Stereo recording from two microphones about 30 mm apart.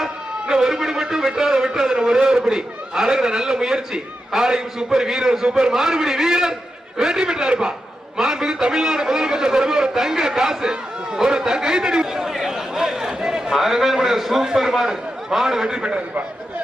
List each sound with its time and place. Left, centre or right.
0.0 s a sound: centre
1.1 s a man's voice: centre
5.7 s a man's voice: centre
12.2 s a sound: centre
14.4 s a man's voice: centre
15.8 s a man's voice: right